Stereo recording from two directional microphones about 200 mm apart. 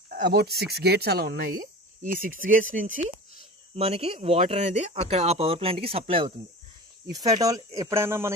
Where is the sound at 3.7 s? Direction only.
30° right (ahead or behind).